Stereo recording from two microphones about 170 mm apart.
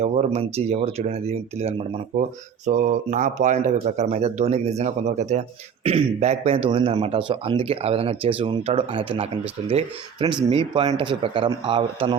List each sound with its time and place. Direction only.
0.0 s speech: 40° right (ahead or behind)